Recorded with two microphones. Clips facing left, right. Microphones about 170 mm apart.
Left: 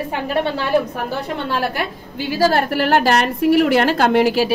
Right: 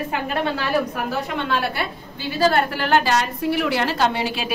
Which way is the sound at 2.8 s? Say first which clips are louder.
Left 4 dB; 45° left (ahead or behind).